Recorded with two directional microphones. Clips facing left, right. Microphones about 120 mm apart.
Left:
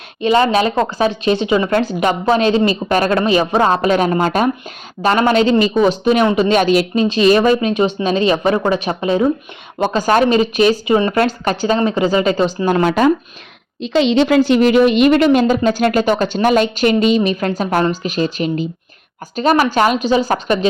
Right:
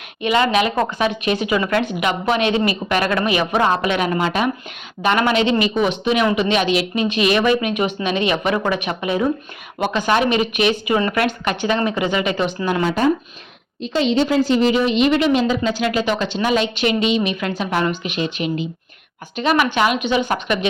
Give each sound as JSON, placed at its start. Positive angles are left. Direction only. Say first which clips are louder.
{"t": 0.2, "sound": "speech", "louder": "left 4 dB", "side_deg": 30}
{"t": 12.8, "sound": "speech", "louder": "left 5 dB", "side_deg": 70}
{"t": 13.8, "sound": "a woman's voice", "louder": "left 4 dB", "side_deg": 90}